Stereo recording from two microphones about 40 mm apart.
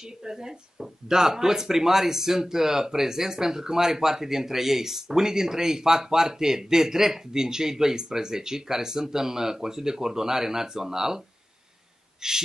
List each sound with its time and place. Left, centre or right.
0.2 s speech: centre
12.2 s speech: centre